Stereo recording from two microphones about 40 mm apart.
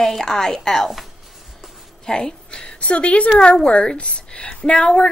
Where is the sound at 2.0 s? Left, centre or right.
Centre.